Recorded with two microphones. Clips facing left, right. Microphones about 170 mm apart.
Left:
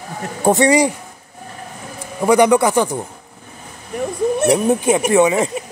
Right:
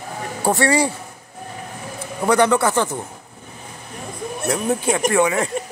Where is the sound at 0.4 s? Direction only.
20° left (ahead or behind).